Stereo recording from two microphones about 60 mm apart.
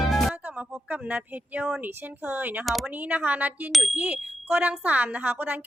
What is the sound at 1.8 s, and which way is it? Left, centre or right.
A woman's voice, right.